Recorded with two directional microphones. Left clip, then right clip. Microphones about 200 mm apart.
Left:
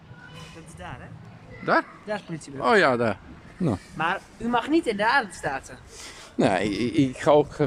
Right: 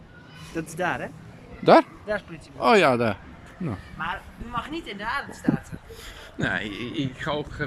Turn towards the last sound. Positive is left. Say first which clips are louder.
# left 10 dB
turn(degrees=35)  # may be behind; listen again after turning